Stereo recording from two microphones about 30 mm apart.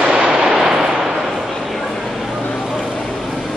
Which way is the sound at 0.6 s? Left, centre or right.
Centre.